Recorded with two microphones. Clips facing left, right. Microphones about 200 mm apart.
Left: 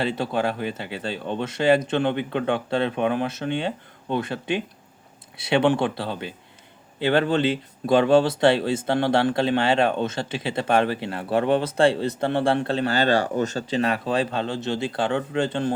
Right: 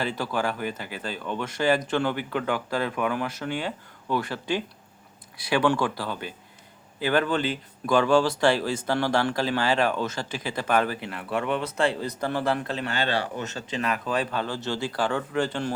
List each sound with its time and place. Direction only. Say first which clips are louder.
0.0 s speech: left 4 dB; 25° left (ahead or behind)